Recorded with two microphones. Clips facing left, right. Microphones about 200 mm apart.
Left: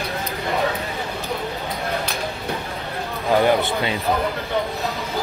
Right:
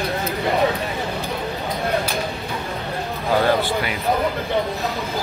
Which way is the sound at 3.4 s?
25° left (ahead or behind).